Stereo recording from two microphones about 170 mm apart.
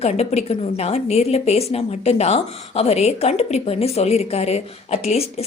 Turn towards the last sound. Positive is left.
turn(degrees=40)  # may be behind; listen again after turning